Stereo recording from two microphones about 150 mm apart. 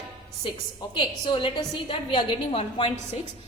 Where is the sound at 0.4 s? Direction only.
30° left (ahead or behind).